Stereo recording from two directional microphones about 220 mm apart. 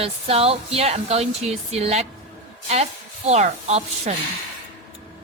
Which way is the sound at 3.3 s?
30° right (ahead or behind).